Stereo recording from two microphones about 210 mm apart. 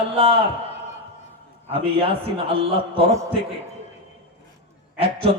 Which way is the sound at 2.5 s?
25° right (ahead or behind).